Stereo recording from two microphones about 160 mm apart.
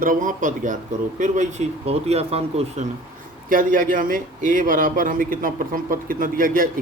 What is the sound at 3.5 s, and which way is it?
A man's voice, 60° right (ahead or behind).